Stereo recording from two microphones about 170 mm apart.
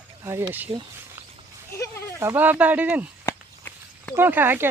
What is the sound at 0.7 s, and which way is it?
Speech, 30° right (ahead or behind).